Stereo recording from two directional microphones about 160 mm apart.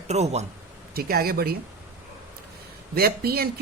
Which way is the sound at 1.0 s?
70° right (ahead or behind).